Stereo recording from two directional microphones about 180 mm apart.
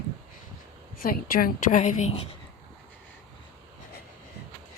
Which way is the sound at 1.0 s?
50° left (ahead or behind).